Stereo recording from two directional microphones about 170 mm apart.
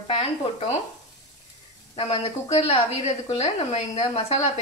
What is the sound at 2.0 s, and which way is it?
A woman's voice, 35° left (ahead or behind).